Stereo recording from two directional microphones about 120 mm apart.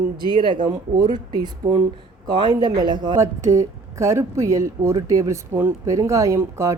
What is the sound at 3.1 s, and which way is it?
Speech, 25° right (ahead or behind).